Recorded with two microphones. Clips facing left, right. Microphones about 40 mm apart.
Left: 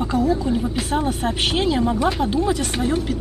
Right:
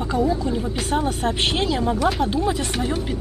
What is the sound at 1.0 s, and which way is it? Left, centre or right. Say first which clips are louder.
Speech: even; centre.